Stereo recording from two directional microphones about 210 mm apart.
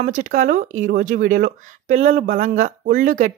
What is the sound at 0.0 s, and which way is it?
Speech, 40° right (ahead or behind).